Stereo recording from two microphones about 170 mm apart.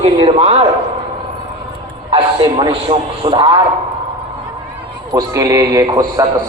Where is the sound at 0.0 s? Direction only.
35° right (ahead or behind).